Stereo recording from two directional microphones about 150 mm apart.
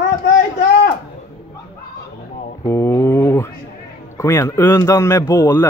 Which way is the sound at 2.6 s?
20° left (ahead or behind).